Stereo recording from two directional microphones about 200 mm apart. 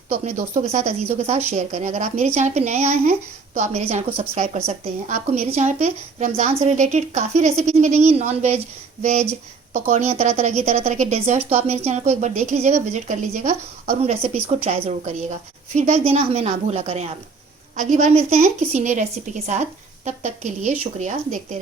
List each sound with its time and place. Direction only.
0.5 s a woman's voice: 30° right (ahead or behind)